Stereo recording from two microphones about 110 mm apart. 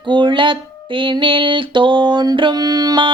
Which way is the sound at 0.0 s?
45° right (ahead or behind).